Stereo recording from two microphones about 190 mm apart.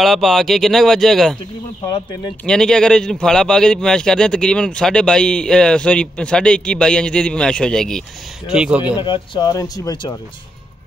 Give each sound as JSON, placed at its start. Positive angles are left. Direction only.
{"t": 0.0, "sound": "a man's voice", "side_deg": 0}
{"t": 1.9, "sound": "speech", "side_deg": 25}
{"t": 2.4, "sound": "a man's voice", "side_deg": 5}
{"t": 8.8, "sound": "speech", "side_deg": 25}